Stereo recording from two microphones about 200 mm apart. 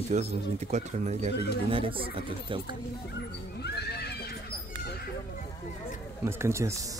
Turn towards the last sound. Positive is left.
turn(degrees=-15)  # may be behind; listen again after turning